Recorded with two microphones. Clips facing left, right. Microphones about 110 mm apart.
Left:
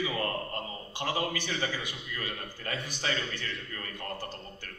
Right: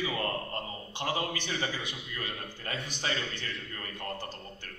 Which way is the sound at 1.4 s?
25° right (ahead or behind).